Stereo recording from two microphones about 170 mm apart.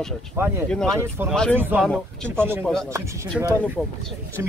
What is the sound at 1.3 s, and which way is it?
Speech, 5° left (ahead or behind).